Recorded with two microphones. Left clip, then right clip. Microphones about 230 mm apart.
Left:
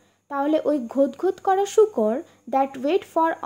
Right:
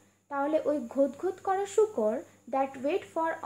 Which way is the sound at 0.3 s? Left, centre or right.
Left.